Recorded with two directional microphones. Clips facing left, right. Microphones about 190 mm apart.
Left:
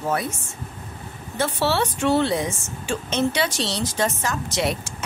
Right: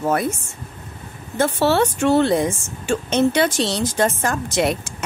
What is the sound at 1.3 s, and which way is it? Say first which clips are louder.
A woman's voice: right 5 dB; 50° right (ahead or behind).